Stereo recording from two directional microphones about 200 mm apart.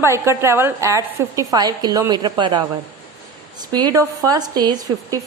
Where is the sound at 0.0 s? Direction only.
15° right (ahead or behind).